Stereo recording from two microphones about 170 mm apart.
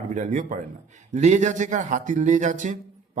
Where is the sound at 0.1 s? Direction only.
50° right (ahead or behind).